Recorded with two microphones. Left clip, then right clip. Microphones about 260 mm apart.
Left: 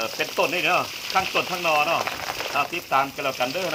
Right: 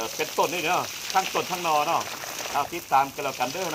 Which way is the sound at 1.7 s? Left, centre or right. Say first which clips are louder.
Left 2 dB; centre.